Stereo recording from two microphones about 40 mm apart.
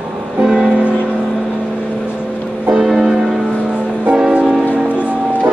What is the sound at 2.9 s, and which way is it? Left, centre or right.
Music, centre.